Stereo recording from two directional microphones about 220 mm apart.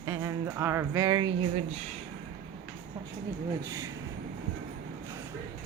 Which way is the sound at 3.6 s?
15° right (ahead or behind).